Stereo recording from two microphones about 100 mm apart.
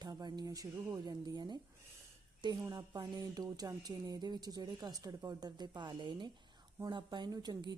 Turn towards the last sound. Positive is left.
turn(degrees=-45)  # may be behind; listen again after turning